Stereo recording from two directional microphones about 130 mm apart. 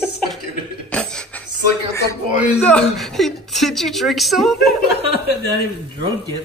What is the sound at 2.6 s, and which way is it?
A woman's voice, 5° left (ahead or behind).